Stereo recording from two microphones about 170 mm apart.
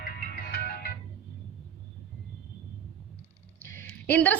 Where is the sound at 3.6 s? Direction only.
15° left (ahead or behind).